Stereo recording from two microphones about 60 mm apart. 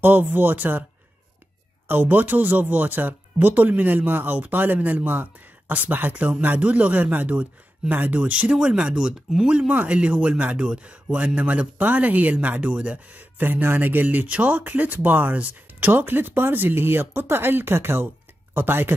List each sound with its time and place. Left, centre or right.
0.0 s speech: right
1.9 s speech: right